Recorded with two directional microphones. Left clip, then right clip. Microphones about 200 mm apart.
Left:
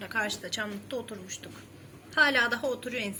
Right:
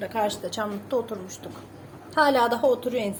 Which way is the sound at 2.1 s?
20° left (ahead or behind).